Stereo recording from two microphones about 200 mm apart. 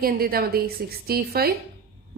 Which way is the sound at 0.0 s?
50° right (ahead or behind).